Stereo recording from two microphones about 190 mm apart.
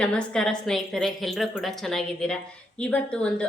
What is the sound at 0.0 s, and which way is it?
A woman's voice, 5° left (ahead or behind).